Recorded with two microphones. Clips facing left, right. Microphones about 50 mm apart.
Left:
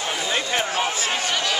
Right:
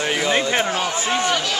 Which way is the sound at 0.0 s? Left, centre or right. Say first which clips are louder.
Right 5 dB; right.